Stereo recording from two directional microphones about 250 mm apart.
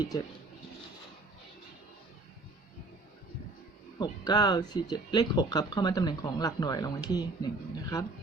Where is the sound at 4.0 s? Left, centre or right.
Centre.